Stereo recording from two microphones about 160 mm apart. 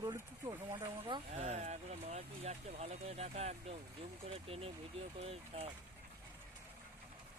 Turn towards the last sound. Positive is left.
turn(degrees=-40)  # may be behind; listen again after turning